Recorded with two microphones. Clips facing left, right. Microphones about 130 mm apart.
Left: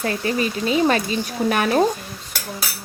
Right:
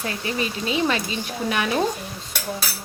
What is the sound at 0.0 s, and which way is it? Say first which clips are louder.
Speech: left 5 dB; 40° left (ahead or behind).